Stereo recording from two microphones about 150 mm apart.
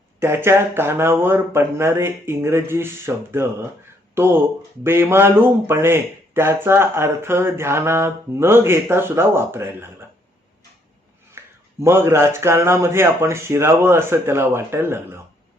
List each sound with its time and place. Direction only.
0.2 s speech: 15° right (ahead or behind)
11.4 s a sound: 15° right (ahead or behind)
11.8 s speech: 15° right (ahead or behind)